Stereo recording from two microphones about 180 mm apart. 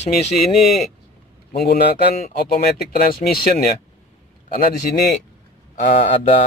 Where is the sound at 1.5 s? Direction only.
60° left (ahead or behind).